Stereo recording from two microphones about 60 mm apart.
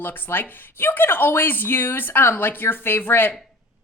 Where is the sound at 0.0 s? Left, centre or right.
Left.